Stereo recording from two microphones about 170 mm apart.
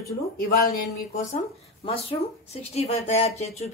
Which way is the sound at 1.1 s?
35° left (ahead or behind).